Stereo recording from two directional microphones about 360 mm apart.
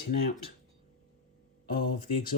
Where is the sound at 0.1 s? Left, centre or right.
Left.